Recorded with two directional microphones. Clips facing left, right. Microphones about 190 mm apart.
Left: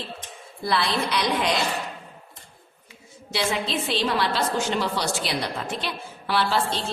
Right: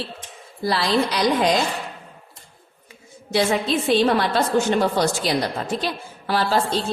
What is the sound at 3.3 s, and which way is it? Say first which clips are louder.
A woman's voice: right 6 dB; 50° right (ahead or behind).